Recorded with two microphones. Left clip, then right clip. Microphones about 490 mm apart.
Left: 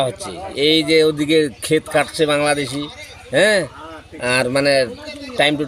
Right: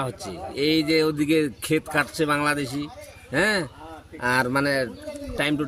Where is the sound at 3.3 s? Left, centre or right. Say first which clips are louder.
Left 8 dB; right.